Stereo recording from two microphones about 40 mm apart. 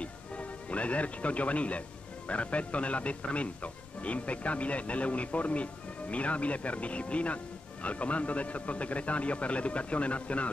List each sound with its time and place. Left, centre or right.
0.0 s speech: left